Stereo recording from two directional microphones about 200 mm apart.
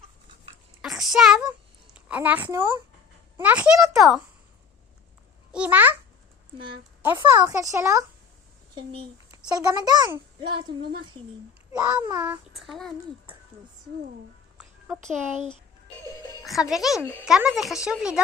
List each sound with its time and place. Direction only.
0.8 s a sound: centre (ahead or behind)
3.3 s a child's voice: 10° right (ahead or behind)
5.5 s a child's voice: 5° right (ahead or behind)
7.0 s a child's voice: 10° right (ahead or behind)
8.7 s a child's voice: 30° right (ahead or behind)
11.7 s a child's voice: 5° right (ahead or behind)
14.6 s speech: centre (ahead or behind)
17.0 s speech: 10° left (ahead or behind)
17.2 s a child's voice: centre (ahead or behind)